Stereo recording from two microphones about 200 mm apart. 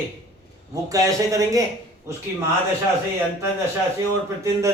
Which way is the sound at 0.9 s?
15° right (ahead or behind).